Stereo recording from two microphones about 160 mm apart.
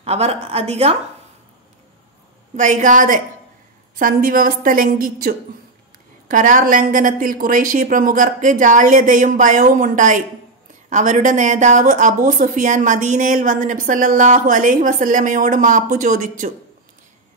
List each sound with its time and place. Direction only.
0.0 s a woman's voice: 40° right (ahead or behind)
2.5 s a woman's voice: 50° right (ahead or behind)